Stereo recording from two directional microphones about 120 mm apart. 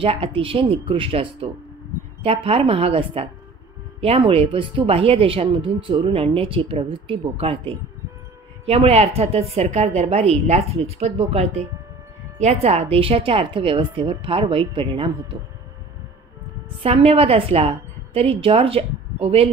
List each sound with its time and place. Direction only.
0.0 s a woman's voice: 50° right (ahead or behind)
16.8 s a woman's voice: 55° right (ahead or behind)